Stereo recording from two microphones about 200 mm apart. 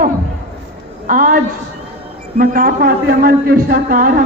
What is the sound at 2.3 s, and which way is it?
A man's voice, 45° right (ahead or behind).